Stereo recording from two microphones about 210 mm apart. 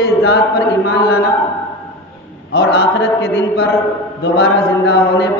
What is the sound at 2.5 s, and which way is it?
Chant, 55° left (ahead or behind).